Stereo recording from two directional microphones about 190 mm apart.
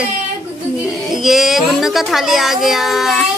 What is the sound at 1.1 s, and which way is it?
Speech, centre (ahead or behind).